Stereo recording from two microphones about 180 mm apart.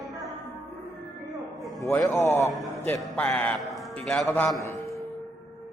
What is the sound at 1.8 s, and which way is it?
A man's voice, 15° left (ahead or behind).